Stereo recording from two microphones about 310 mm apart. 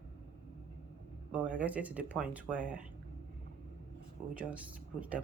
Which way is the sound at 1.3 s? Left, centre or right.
Centre.